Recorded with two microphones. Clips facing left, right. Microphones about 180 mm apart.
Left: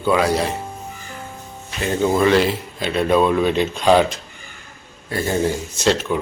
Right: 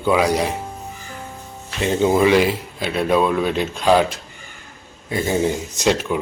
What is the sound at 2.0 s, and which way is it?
Speech, 10° right (ahead or behind).